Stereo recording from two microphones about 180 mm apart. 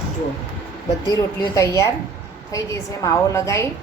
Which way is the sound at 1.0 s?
20° left (ahead or behind).